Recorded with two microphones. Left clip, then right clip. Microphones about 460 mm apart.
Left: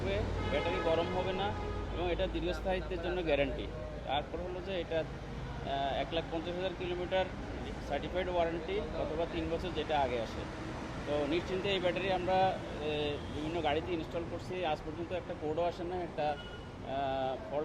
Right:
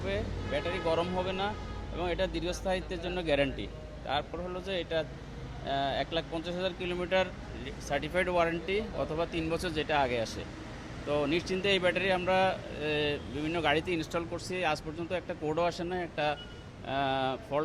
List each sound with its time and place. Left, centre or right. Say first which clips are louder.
0.9 s vehicle: right 2 dB; right
2.0 s speech: right 3 dB; right